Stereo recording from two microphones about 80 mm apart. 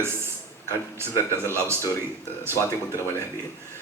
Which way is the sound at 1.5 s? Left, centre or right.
Right.